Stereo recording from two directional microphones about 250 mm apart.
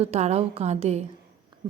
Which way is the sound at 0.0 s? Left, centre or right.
Right.